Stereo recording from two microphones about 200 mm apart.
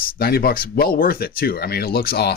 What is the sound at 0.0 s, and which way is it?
Speech, 50° left (ahead or behind).